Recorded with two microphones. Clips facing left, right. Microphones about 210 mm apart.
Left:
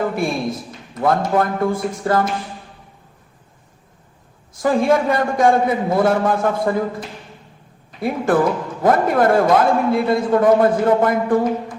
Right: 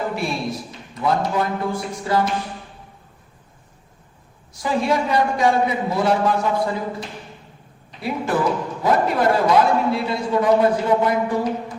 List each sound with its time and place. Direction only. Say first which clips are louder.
0.9 s a man's voice: left 4 dB; 50° left (ahead or behind)
4.5 s a man's voice: left 5 dB; 50° left (ahead or behind)
7.9 s a man's voice: left 5 dB; 50° left (ahead or behind)